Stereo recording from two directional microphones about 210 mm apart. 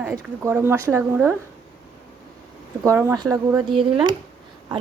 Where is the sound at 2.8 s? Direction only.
15° right (ahead or behind).